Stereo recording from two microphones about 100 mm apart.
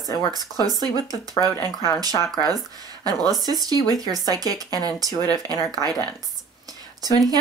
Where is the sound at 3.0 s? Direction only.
40° right (ahead or behind).